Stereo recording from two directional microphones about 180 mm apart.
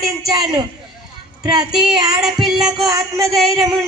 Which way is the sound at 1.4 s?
20° right (ahead or behind).